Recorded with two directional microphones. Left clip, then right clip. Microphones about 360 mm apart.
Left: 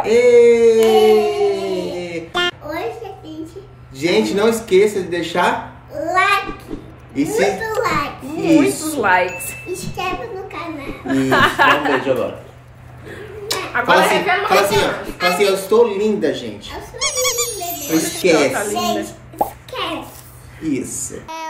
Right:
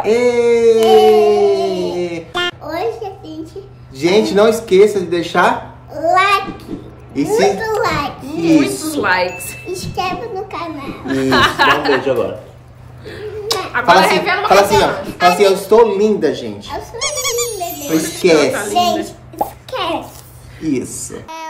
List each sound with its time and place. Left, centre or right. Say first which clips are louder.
0.0 s a sound: left 2 dB; centre
4.0 s speech: right 4 dB; centre
6.0 s babbling: right 4 dB; centre
7.2 s a child's voice: right 3 dB; centre
7.7 s a sound: right 2 dB; centre
11.1 s speech: right 1 dB; centre
13.7 s speech: right 3 dB; centre
14.8 s speech: right 5 dB; centre
17.0 s music: even; centre
18.5 s plop: right 5 dB; centre
20.6 s speech: right 3 dB; centre